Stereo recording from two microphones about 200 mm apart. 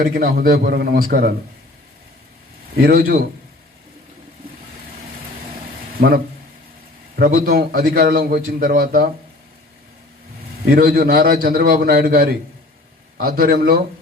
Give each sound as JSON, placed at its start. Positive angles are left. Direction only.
{"t": 0.0, "sound": "a man's voice", "side_deg": -45}
{"t": 2.7, "sound": "a man's voice", "side_deg": -50}
{"t": 6.0, "sound": "a man's voice", "side_deg": -50}
{"t": 10.7, "sound": "a man's voice", "side_deg": -50}